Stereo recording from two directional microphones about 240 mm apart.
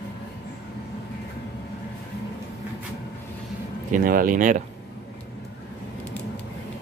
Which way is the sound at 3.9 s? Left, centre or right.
Right.